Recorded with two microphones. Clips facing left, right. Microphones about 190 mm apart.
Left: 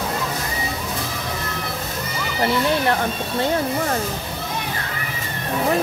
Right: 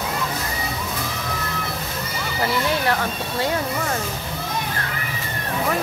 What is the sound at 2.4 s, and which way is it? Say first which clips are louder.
Speech: left 3 dB; 25° left (ahead or behind).